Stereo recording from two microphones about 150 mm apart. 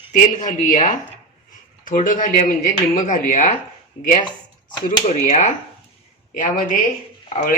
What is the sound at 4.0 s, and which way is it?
A man's voice, 50° left (ahead or behind).